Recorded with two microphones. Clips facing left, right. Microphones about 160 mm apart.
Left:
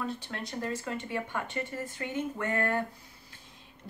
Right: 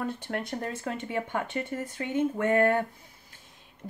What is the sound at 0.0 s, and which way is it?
Speech, 55° right (ahead or behind).